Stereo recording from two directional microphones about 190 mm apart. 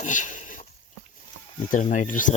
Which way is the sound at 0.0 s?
40° left (ahead or behind).